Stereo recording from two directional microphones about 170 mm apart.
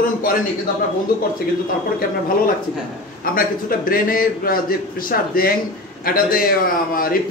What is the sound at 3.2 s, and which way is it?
A man's voice, 55° left (ahead or behind).